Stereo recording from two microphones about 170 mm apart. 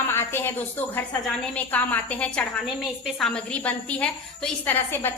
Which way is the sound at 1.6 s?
10° left (ahead or behind).